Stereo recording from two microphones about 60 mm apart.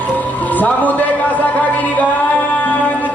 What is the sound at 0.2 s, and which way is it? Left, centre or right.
Music, left.